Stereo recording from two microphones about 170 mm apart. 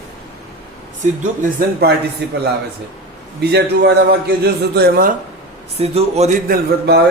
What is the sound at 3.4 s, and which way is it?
A man's voice, 75° right (ahead or behind).